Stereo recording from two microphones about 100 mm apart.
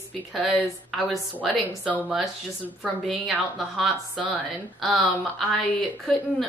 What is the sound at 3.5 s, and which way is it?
Speech, centre (ahead or behind).